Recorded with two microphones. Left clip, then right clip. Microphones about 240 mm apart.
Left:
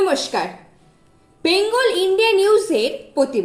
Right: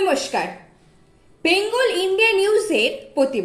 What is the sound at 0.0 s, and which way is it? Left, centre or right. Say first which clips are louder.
Speech: left 1 dB; centre.